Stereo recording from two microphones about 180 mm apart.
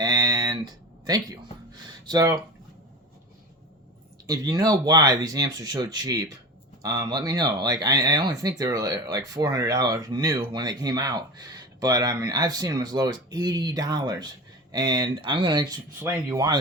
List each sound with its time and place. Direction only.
0.0 s a sound: 20° right (ahead or behind)
2.0 s speech: 20° right (ahead or behind)
4.3 s speech: 20° right (ahead or behind)